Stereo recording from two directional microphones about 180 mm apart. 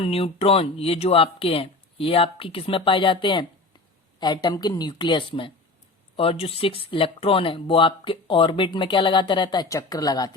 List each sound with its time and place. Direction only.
0.0 s speech: 30° left (ahead or behind)